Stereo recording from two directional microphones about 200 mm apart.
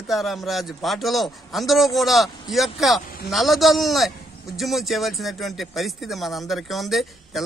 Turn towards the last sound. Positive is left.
turn(degrees=0)  # may be behind; listen again after turning